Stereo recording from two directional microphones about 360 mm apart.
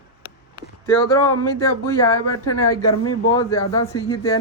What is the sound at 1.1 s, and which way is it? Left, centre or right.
A woman's voice, centre.